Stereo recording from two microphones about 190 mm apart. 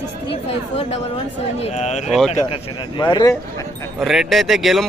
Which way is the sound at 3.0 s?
25° left (ahead or behind).